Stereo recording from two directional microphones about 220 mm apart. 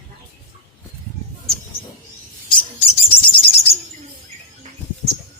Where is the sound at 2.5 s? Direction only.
25° left (ahead or behind).